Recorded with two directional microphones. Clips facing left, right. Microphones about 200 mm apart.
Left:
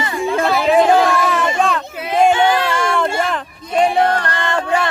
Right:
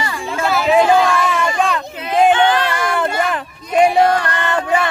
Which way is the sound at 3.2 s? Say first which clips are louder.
Right 1 dB; 10° right (ahead or behind).